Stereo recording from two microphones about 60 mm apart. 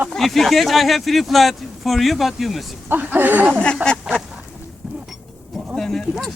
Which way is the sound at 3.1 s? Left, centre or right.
Right.